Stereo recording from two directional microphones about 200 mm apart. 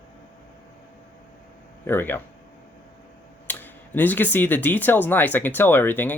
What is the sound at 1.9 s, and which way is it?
Speech, 10° left (ahead or behind).